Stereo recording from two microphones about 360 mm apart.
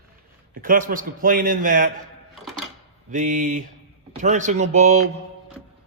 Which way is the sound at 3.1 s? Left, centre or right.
Right.